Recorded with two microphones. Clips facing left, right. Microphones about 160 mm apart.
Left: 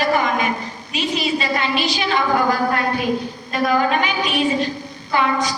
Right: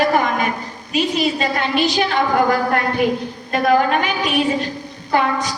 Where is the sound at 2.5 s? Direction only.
55° right (ahead or behind).